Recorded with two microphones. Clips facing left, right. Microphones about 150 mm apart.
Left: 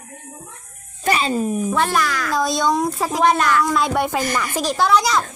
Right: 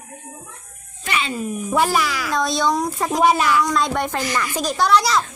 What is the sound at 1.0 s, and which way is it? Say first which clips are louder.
Speech: left 5 dB; 35° left (ahead or behind).